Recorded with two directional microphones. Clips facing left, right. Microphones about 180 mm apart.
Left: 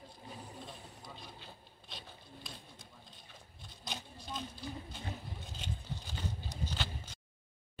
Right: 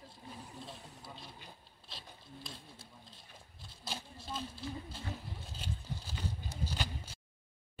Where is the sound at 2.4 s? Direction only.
5° right (ahead or behind).